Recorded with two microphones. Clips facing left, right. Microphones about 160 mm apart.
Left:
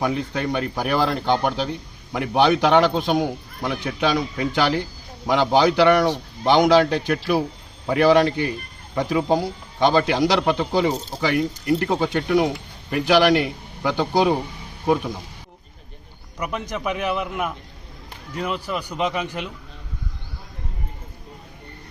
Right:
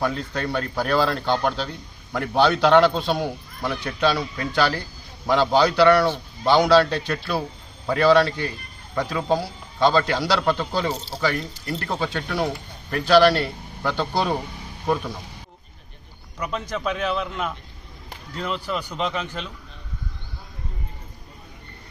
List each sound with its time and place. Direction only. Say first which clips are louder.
0.0 s a man's voice: left 2 dB; 15° left (ahead or behind)
16.4 s a man's voice: even; 15° left (ahead or behind)